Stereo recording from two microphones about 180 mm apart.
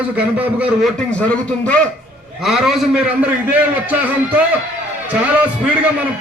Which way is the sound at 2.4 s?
Centre (ahead or behind).